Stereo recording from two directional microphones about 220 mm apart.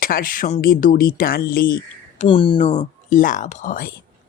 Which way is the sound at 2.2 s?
25° left (ahead or behind).